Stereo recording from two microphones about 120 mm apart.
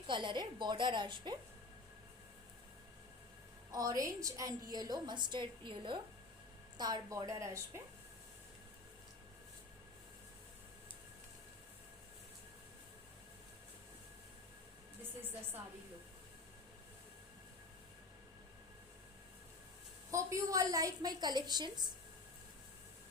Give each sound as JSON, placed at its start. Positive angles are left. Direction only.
{"t": 0.1, "sound": "a woman's voice", "side_deg": -40}
{"t": 3.7, "sound": "a woman's voice", "side_deg": -30}
{"t": 20.1, "sound": "a woman's voice", "side_deg": -25}